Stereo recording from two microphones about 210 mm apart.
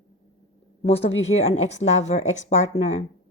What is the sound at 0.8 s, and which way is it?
Speech, 30° left (ahead or behind).